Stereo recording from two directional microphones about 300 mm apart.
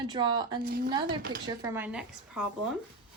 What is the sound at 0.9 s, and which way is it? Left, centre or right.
Speech, centre.